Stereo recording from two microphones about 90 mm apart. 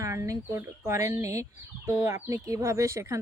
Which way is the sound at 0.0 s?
35° right (ahead or behind).